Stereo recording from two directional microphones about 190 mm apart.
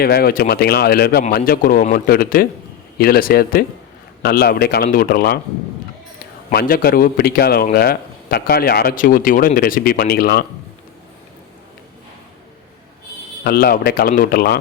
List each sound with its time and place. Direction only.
0.0 s a man's voice: 50° left (ahead or behind)
6.5 s a man's voice: 55° left (ahead or behind)
13.4 s a man's voice: 55° left (ahead or behind)